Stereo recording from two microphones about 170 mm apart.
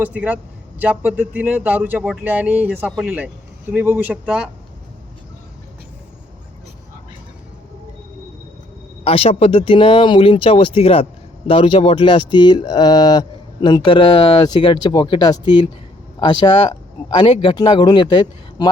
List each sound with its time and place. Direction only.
0.0 s speech: 10° right (ahead or behind)
9.0 s speech: 35° left (ahead or behind)